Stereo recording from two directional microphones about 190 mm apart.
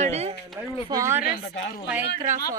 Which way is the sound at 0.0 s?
35° right (ahead or behind).